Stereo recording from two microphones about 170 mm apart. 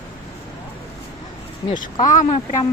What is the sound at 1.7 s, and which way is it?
Speech, 25° left (ahead or behind).